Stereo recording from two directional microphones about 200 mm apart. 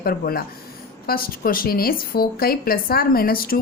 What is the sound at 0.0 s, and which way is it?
A woman's voice, 50° left (ahead or behind).